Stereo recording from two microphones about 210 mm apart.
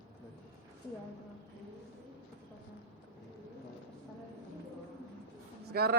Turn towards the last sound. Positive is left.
turn(degrees=-50)  # may be behind; listen again after turning